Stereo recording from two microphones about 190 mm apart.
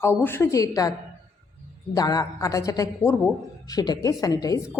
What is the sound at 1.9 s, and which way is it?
A woman's voice, 20° left (ahead or behind).